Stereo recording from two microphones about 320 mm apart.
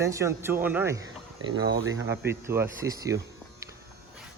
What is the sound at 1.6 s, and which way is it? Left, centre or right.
Speech, right.